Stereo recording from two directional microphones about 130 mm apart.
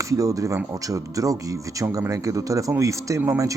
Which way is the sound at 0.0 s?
25° right (ahead or behind).